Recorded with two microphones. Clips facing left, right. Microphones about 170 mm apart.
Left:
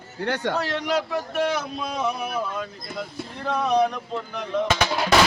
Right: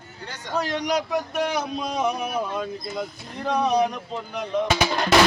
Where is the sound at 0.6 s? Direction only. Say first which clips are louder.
Even; 15° right (ahead or behind).